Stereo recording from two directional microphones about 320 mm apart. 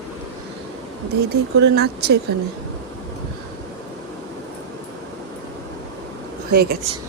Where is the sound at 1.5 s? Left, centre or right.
Right.